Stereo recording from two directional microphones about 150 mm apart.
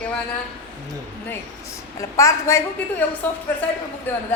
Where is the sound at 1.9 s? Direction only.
20° left (ahead or behind).